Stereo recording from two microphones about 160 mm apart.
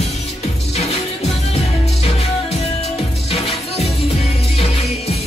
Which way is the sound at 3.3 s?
40° left (ahead or behind).